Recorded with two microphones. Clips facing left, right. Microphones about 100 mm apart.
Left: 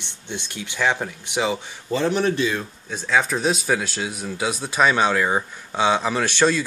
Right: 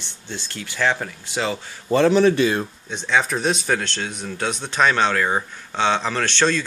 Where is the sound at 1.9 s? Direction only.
75° right (ahead or behind).